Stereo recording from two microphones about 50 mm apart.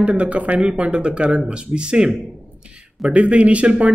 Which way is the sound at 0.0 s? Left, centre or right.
Right.